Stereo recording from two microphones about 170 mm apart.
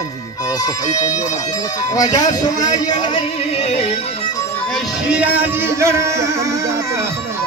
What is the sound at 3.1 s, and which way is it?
Music, 35° left (ahead or behind).